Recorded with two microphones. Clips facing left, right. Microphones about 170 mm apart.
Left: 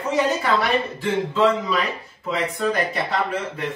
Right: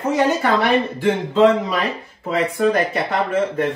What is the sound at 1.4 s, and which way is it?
A man's voice, 60° right (ahead or behind).